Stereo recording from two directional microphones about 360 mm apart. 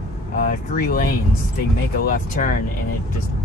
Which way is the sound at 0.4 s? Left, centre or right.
Left.